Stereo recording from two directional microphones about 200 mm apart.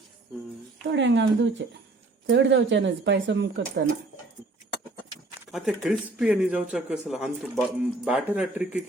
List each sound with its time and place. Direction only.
0.9 s speech: 65° right (ahead or behind)
5.5 s speech: centre (ahead or behind)